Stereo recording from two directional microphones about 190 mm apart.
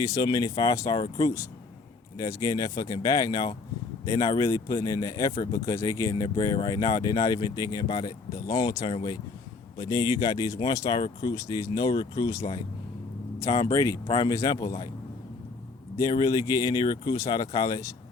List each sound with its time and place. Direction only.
0.0 s speech: 20° left (ahead or behind)
13.5 s speech: 20° left (ahead or behind)
16.0 s speech: 20° left (ahead or behind)